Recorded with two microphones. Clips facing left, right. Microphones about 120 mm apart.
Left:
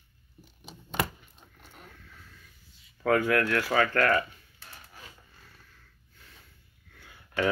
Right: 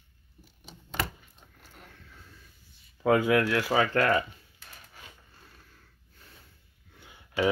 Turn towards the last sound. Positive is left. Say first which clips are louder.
# right 1 dB
turn(degrees=-20)  # may be behind; listen again after turning